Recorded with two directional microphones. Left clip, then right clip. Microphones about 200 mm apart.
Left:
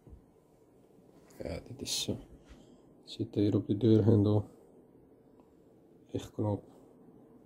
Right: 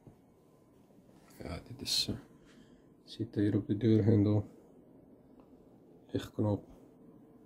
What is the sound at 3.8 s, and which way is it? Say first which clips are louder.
Speech: left 3 dB; 10° right (ahead or behind).